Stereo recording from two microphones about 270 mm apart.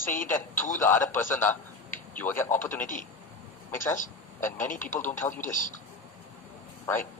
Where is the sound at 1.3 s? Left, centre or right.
Centre.